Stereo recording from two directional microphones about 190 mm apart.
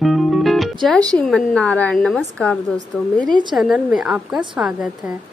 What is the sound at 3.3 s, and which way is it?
Speech, 25° right (ahead or behind).